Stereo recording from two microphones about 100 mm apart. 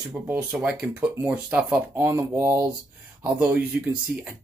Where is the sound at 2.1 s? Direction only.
25° right (ahead or behind).